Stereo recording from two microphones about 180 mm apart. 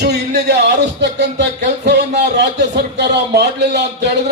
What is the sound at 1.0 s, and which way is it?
A man's voice, 70° right (ahead or behind).